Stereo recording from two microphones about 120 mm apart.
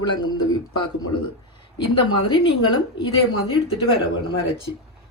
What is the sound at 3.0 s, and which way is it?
Speech, 50° left (ahead or behind).